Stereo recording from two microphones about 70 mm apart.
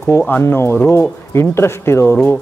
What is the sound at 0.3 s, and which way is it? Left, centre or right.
A man's voice, left.